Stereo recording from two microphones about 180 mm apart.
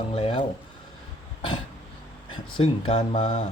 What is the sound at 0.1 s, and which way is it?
Speech, 30° left (ahead or behind).